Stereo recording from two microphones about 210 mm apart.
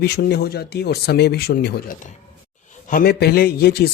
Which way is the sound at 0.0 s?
50° left (ahead or behind).